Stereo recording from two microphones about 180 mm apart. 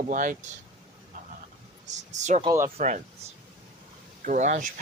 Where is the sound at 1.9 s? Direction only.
40° right (ahead or behind).